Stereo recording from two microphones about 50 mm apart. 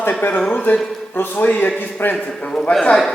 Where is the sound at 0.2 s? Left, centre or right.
Left.